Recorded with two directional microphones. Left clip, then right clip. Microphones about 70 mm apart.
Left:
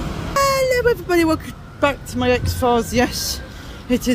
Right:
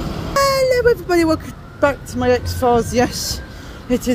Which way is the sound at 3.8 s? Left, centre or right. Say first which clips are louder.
Right 1 dB; left.